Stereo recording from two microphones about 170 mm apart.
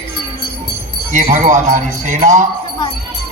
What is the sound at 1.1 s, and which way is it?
Speech, 45° right (ahead or behind).